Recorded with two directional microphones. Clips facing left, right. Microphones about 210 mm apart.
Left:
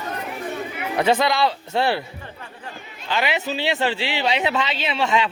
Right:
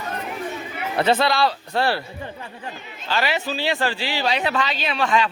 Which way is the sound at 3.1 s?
20° left (ahead or behind).